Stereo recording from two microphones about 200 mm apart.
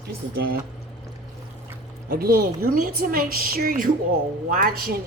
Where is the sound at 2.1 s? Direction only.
50° right (ahead or behind).